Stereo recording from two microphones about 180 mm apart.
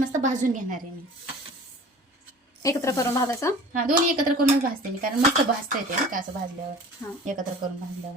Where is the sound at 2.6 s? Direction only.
20° left (ahead or behind).